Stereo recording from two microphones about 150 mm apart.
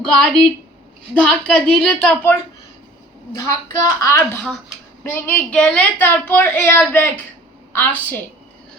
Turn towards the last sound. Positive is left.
turn(degrees=15)  # may be behind; listen again after turning